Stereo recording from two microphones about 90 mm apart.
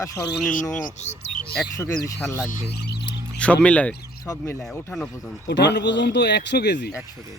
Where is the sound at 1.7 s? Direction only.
40° left (ahead or behind).